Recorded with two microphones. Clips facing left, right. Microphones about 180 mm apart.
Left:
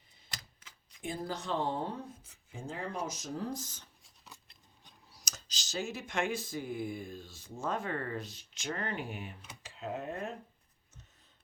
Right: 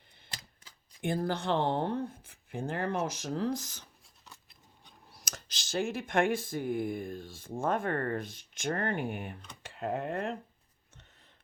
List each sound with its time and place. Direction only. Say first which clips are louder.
1.0 s speech: right 6 dB; 60° right (ahead or behind); by 3.8 s 80° right
4.0 s scissors: even; centre (ahead or behind)
5.0 s speech: right 5 dB; 55° right (ahead or behind)